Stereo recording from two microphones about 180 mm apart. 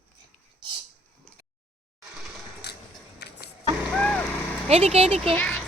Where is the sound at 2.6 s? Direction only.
65° left (ahead or behind).